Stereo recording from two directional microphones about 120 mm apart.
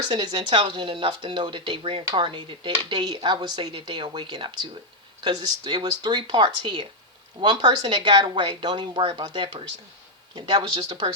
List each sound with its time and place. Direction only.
0.1 s speech: 40° right (ahead or behind)
2.9 s a woman's voice: 35° right (ahead or behind)